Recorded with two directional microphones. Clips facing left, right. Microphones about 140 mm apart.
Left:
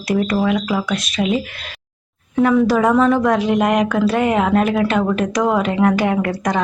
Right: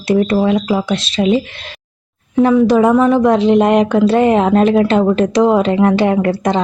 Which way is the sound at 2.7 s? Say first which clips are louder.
Right 4 dB; 20° right (ahead or behind).